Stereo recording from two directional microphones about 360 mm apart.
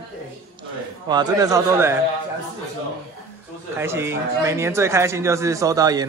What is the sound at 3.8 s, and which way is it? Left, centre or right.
Speech, centre.